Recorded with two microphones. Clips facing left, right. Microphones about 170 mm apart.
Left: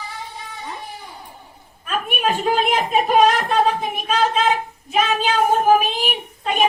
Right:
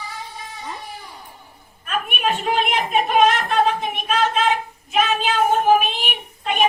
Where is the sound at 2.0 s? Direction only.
35° left (ahead or behind).